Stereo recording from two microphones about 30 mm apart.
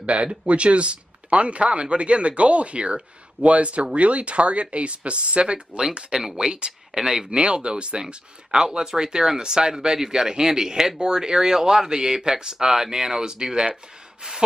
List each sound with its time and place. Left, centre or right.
0.0 s speech: right
6.9 s speech: centre